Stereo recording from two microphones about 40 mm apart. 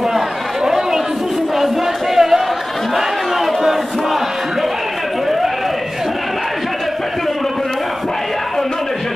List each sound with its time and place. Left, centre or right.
0.7 s chatter: centre
2.1 s chatter: centre